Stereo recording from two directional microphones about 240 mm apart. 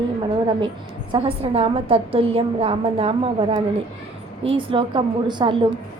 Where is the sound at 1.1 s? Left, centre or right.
Right.